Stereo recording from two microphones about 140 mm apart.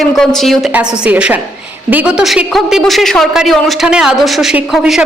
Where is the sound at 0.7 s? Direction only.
10° right (ahead or behind).